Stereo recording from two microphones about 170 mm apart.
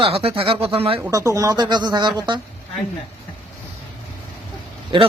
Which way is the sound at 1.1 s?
20° right (ahead or behind).